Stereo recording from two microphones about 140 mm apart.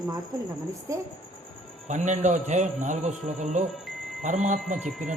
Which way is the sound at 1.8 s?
60° right (ahead or behind).